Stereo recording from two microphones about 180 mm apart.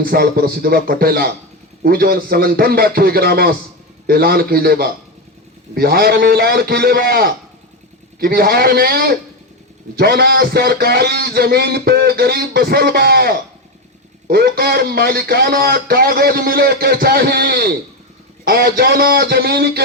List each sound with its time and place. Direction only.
0.0 s speech: 55° right (ahead or behind)